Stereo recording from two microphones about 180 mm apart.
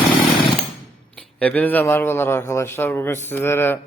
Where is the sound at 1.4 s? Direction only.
10° left (ahead or behind).